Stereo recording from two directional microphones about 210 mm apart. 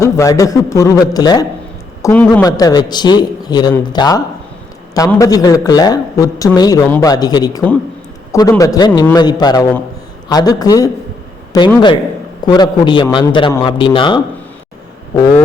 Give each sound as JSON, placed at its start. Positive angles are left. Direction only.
{"t": 0.0, "sound": "a man's voice", "side_deg": 15}
{"t": 2.5, "sound": "a man's voice", "side_deg": 20}